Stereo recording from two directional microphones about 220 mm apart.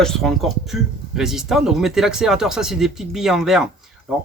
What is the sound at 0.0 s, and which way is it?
Speech, centre (ahead or behind).